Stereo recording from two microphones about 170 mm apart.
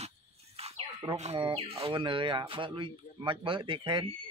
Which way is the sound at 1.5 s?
35° right (ahead or behind).